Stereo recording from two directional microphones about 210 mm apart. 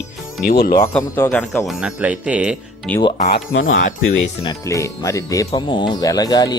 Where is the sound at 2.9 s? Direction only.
5° left (ahead or behind).